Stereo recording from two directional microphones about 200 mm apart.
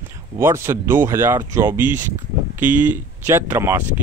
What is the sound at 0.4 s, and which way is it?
Speech, 10° right (ahead or behind).